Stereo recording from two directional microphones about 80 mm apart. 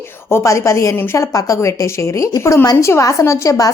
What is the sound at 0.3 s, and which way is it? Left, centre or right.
A woman's voice, left.